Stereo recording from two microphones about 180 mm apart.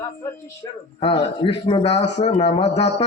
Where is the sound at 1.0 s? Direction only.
30° left (ahead or behind).